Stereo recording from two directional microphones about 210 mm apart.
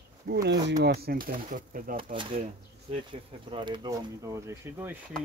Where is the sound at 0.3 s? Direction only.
50° right (ahead or behind); by 4.9 s 10° right (ahead or behind).